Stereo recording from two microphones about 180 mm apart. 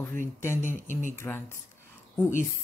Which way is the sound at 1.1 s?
15° left (ahead or behind).